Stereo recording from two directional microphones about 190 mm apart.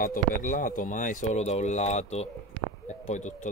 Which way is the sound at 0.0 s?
45° left (ahead or behind).